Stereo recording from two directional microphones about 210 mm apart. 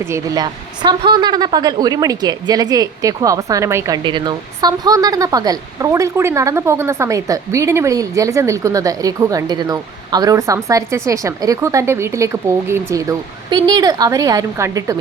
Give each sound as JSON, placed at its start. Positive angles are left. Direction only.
{"t": 0.1, "sound": "a woman's voice", "side_deg": -20}